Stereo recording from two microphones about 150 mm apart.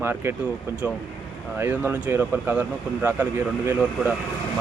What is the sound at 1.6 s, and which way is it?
Speech, 15° right (ahead or behind).